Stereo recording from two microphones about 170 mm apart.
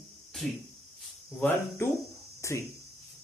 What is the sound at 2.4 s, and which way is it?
Speech, 15° left (ahead or behind).